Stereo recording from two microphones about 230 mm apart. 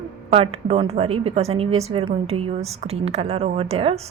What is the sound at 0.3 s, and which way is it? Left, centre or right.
Speech, right.